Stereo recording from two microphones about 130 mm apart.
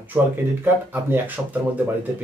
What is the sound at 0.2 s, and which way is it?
Speech, 10° right (ahead or behind).